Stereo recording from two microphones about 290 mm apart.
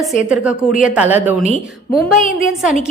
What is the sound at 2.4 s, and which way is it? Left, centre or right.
Speech, centre.